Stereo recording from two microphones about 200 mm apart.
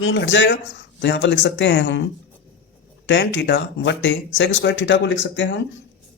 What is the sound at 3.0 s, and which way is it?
Speech, 65° left (ahead or behind).